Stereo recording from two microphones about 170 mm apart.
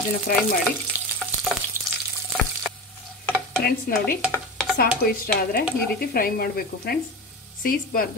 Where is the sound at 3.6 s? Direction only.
65° left (ahead or behind).